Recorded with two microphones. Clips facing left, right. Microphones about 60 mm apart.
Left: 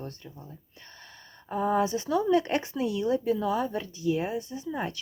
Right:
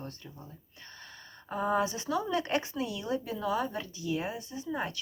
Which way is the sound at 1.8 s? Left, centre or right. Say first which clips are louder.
Left 5 dB; left.